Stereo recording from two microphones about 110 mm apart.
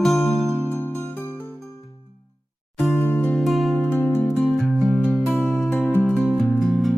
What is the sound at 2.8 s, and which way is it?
Music, 20° left (ahead or behind).